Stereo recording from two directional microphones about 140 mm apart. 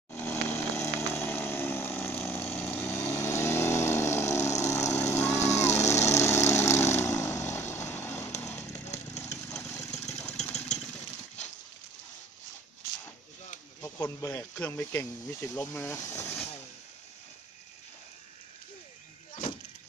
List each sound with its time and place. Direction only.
0.1 s a sound: 15° left (ahead or behind)
4.6 s vehicle: 20° left (ahead or behind)
8.5 s chainsaw: 15° left (ahead or behind)
9.8 s engine: 55° left (ahead or behind)
13.7 s speech: 15° left (ahead or behind)